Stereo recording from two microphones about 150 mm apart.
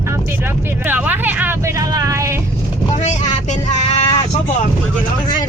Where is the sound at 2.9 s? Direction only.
50° left (ahead or behind).